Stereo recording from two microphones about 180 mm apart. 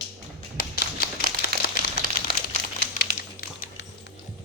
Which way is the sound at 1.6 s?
55° left (ahead or behind).